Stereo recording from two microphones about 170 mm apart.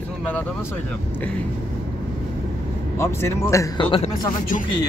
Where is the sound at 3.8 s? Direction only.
30° left (ahead or behind).